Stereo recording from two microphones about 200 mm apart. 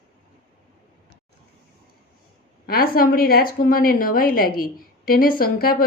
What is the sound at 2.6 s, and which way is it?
A woman's voice, 50° left (ahead or behind).